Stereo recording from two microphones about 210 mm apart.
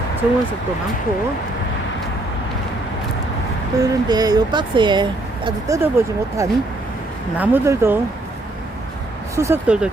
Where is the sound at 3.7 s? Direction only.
15° right (ahead or behind).